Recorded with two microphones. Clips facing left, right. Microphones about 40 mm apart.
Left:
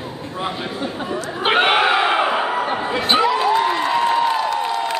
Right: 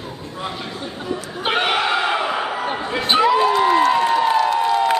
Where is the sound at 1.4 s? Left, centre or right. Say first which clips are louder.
Left 4 dB; left.